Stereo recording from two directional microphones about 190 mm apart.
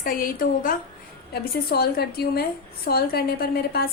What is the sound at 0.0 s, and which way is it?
A woman's voice, 50° left (ahead or behind).